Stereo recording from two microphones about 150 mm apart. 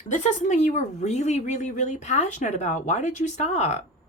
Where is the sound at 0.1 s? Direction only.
55° left (ahead or behind).